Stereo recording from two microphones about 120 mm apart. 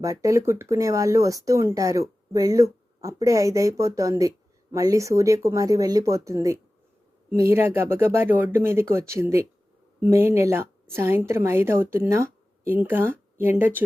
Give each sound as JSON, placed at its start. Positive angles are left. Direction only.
{"t": 0.0, "sound": "speech", "side_deg": -25}